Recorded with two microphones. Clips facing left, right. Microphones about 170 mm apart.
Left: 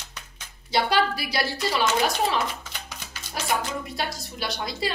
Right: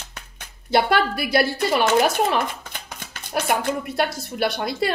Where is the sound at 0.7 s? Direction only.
55° right (ahead or behind).